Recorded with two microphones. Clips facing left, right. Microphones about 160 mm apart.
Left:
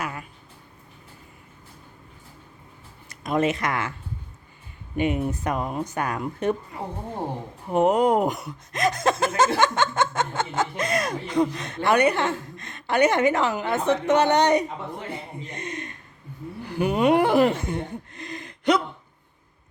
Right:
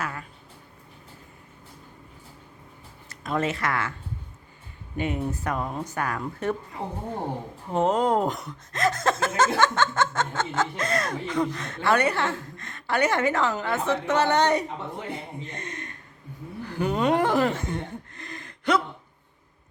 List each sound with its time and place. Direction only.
0.0 s a sound: 15° left (ahead or behind)
3.1 s speech: 15° left (ahead or behind)
4.9 s speech: 20° left (ahead or behind)
7.7 s speech: 15° left (ahead or behind)
15.5 s a sound: 20° left (ahead or behind)
16.6 s speech: 15° left (ahead or behind)